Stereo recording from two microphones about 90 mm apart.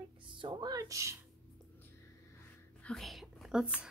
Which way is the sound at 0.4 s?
60° right (ahead or behind).